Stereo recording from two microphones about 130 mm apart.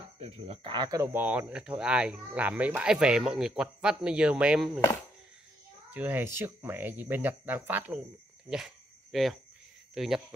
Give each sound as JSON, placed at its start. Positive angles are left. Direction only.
{"t": 0.2, "sound": "speech", "side_deg": -45}
{"t": 0.8, "sound": "speech", "side_deg": -25}
{"t": 1.1, "sound": "speech", "side_deg": -15}
{"t": 5.9, "sound": "speech", "side_deg": -15}
{"t": 8.5, "sound": "cricket", "side_deg": -5}
{"t": 9.9, "sound": "speech", "side_deg": -5}